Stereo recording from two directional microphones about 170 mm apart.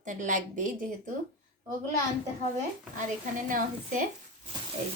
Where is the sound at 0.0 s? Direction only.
50° right (ahead or behind).